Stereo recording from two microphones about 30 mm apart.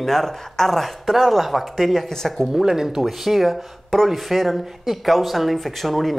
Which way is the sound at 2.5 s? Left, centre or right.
Centre.